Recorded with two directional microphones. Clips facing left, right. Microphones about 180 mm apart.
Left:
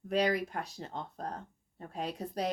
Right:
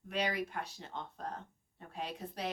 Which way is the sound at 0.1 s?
40° left (ahead or behind).